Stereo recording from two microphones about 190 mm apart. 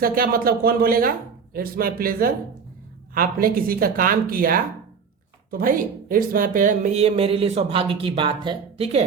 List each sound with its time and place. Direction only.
0.0 s speech: 50° right (ahead or behind); by 9.0 s 30° right (ahead or behind)